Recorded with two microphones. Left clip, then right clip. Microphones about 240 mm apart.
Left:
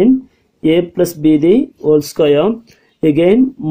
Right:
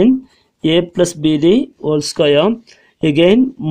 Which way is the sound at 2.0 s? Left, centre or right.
Right.